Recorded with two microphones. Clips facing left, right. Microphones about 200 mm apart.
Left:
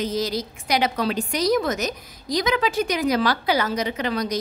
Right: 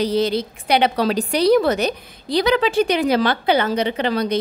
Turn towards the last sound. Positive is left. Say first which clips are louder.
# right 4 dB
turn(degrees=-30)  # may be behind; listen again after turning